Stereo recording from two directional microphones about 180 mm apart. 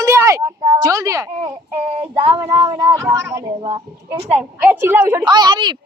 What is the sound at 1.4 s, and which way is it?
Child singing, 30° right (ahead or behind).